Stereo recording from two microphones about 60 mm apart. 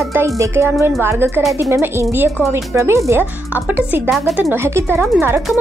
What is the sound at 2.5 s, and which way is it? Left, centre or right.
Speech, right.